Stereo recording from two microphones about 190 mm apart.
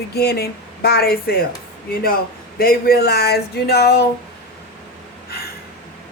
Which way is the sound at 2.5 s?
55° left (ahead or behind).